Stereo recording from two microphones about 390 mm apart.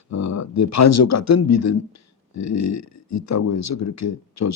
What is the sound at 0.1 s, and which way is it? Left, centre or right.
Speech, left.